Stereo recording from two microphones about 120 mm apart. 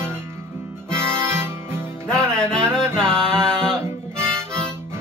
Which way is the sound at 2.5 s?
5° left (ahead or behind).